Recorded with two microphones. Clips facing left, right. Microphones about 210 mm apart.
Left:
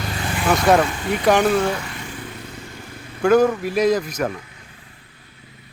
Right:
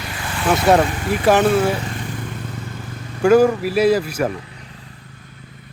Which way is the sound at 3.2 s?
10° right (ahead or behind).